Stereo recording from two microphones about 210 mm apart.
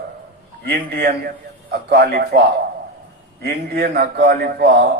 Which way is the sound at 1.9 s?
45° right (ahead or behind).